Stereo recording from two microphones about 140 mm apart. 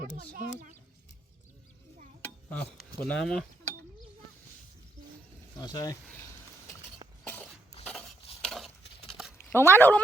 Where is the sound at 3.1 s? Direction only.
5° left (ahead or behind).